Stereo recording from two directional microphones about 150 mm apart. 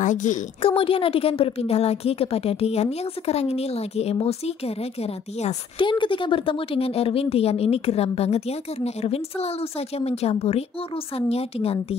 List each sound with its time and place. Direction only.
0.0 s a woman's voice: 55° left (ahead or behind)
0.6 s a woman's voice: 40° left (ahead or behind)